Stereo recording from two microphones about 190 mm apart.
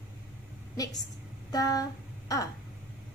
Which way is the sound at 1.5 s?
20° left (ahead or behind).